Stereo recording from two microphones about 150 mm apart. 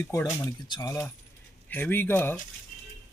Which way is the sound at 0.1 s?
20° left (ahead or behind).